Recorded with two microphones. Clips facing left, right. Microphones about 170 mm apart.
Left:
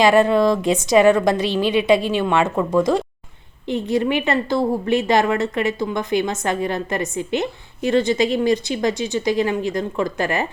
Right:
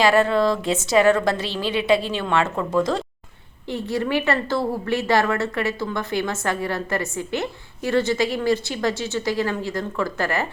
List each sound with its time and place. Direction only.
0.0 s a woman's voice: 15° left (ahead or behind)